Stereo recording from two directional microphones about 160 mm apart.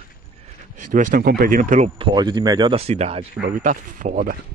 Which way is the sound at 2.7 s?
40° right (ahead or behind).